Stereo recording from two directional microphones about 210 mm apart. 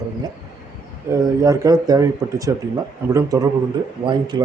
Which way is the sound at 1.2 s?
15° right (ahead or behind).